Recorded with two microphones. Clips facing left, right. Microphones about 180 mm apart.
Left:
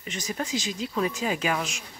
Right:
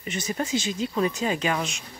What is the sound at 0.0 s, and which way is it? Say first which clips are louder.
Speech: right 3 dB; 5° right (ahead or behind).